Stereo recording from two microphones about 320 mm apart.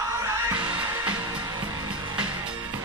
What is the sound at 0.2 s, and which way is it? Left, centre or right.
Music, centre.